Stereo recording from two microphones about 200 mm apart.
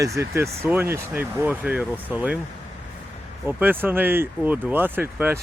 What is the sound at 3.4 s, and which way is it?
Speech, 10° right (ahead or behind).